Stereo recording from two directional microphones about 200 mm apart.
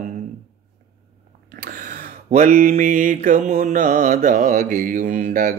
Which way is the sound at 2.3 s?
40° right (ahead or behind).